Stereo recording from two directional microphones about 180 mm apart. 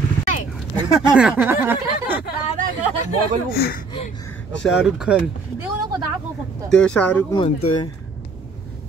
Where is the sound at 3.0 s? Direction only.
55° left (ahead or behind).